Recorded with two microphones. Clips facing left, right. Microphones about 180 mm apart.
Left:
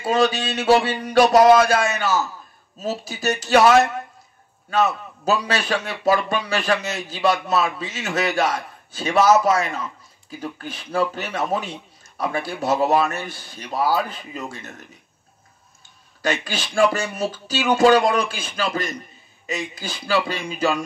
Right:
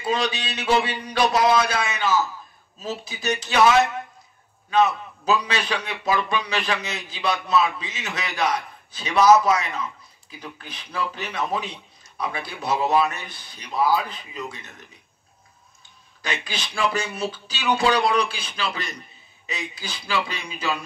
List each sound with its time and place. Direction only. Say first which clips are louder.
0.0 s a man's voice: left 6 dB; 45° left (ahead or behind)
16.2 s a man's voice: left 6 dB; 45° left (ahead or behind)